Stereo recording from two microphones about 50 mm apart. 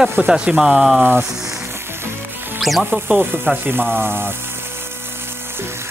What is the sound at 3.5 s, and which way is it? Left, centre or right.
Speech, right.